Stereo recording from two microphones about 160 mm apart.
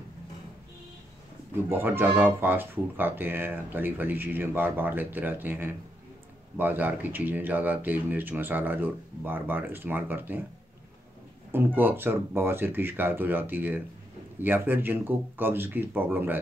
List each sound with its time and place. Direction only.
1.7 s speech: 15° right (ahead or behind)
11.5 s speech: 10° right (ahead or behind)